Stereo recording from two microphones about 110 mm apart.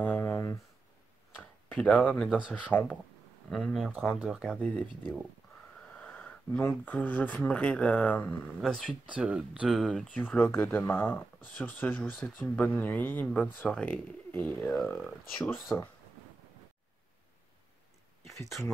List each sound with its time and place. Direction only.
0.0 s a sound: 15° left (ahead or behind)
1.7 s speech: 10° left (ahead or behind)
2.2 s speech: 10° right (ahead or behind)
2.6 s speech: 15° left (ahead or behind)
3.4 s speech: centre (ahead or behind)
4.6 s speech: 10° left (ahead or behind)
8.5 s speech: 5° left (ahead or behind)
9.0 s speech: 10° right (ahead or behind)
10.1 s speech: 15° left (ahead or behind)